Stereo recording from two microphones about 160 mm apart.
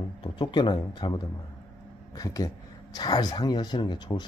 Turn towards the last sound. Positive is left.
turn(degrees=25)  # may be behind; listen again after turning